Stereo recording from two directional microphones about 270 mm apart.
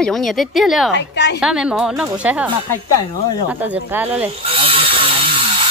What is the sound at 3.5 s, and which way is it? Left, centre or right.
Speech, centre.